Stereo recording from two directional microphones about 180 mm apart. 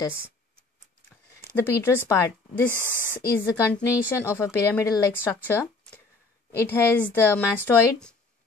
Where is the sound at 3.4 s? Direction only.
15° left (ahead or behind).